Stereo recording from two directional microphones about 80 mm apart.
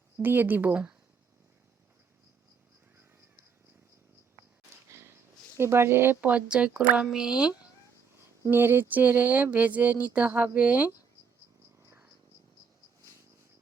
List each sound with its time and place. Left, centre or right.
0.2 s speech: right
5.5 s speech: right
6.3 s speech: centre
8.4 s speech: right